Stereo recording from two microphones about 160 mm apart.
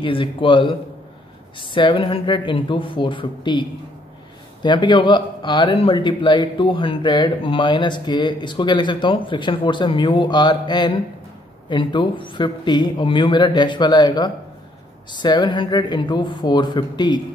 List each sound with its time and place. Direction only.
0.0 s speech: 35° left (ahead or behind)
4.6 s speech: 30° left (ahead or behind)